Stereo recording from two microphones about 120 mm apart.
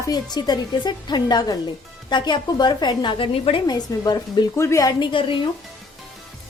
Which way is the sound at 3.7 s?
35° left (ahead or behind).